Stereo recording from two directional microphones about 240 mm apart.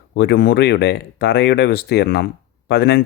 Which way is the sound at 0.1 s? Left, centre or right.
Left.